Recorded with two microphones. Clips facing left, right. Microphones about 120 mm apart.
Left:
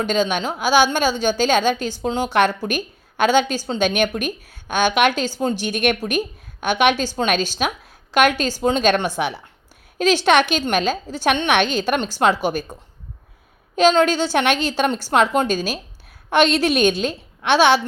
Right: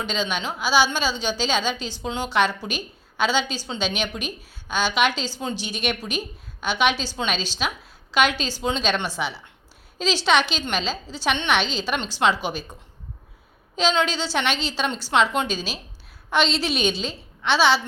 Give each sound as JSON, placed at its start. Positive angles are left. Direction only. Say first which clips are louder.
{"t": 0.0, "sound": "a woman's voice", "louder": "left 7 dB", "side_deg": 45}
{"t": 13.7, "sound": "a woman's voice", "louder": "left 7 dB", "side_deg": 50}